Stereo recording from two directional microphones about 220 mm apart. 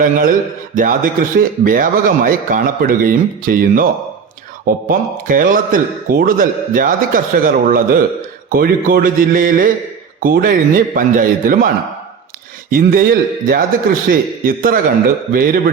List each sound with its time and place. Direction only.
0.0 s a man's voice: 40° right (ahead or behind)
4.9 s a man's voice: 40° right (ahead or behind)
12.7 s a man's voice: 40° right (ahead or behind)